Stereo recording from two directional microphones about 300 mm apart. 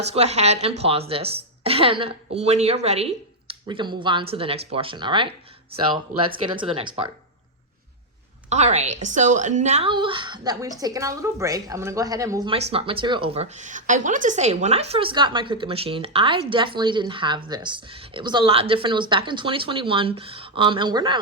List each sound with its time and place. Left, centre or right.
0.1 s a woman's voice: right
8.4 s a woman's voice: right